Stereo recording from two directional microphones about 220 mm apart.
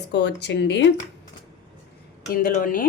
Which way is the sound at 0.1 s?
50° left (ahead or behind).